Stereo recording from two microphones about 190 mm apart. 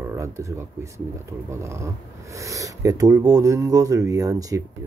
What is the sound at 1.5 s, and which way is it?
Speech, 15° right (ahead or behind).